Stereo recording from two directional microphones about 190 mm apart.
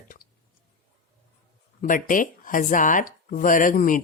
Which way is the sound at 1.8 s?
45° left (ahead or behind).